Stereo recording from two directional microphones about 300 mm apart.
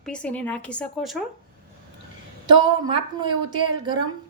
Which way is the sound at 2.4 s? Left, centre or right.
Centre.